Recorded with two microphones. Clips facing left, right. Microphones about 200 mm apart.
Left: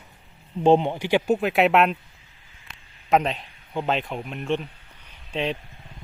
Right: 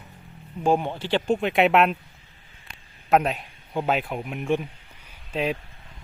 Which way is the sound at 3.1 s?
5° right (ahead or behind).